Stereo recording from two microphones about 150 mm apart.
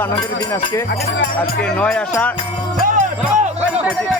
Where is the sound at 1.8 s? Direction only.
5° left (ahead or behind).